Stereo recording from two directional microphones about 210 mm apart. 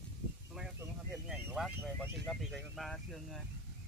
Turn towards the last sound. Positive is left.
turn(degrees=0)  # may be behind; listen again after turning